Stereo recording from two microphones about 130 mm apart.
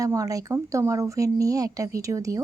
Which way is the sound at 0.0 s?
25° right (ahead or behind).